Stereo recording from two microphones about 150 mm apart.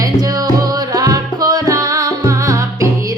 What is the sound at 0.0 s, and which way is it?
Music, 25° right (ahead or behind).